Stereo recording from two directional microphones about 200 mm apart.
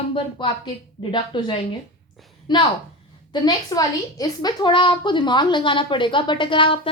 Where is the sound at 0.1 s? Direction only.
25° left (ahead or behind).